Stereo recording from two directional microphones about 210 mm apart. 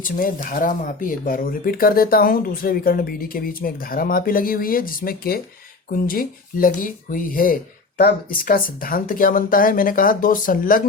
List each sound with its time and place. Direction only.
0.0 s speech: 40° left (ahead or behind)